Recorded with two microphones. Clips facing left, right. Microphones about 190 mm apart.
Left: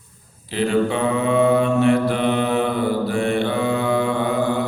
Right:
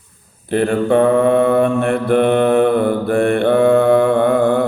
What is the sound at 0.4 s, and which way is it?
Mantra, 55° right (ahead or behind).